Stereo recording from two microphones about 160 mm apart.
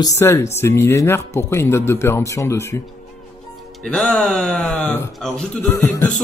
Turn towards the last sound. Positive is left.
turn(degrees=10)  # may be behind; listen again after turning